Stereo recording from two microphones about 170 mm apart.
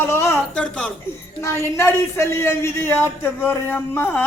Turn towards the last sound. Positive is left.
turn(degrees=15)  # may be behind; listen again after turning